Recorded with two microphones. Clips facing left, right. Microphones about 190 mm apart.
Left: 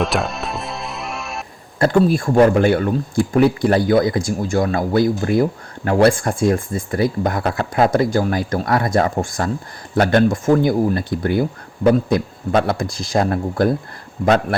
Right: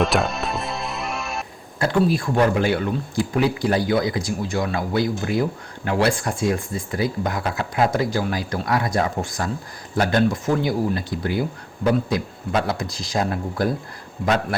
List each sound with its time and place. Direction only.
0.0 s music: centre (ahead or behind)
1.8 s speech: 50° left (ahead or behind)